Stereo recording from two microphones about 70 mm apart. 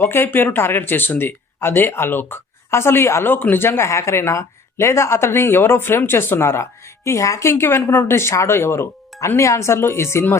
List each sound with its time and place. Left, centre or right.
0.1 s speech: left